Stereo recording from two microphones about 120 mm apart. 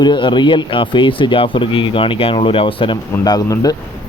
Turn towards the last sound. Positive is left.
turn(degrees=30)  # may be behind; listen again after turning